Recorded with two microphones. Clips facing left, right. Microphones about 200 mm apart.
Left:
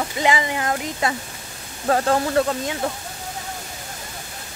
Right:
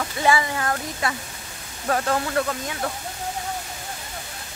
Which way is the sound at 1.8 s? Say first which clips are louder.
Left 4 dB; 30° left (ahead or behind).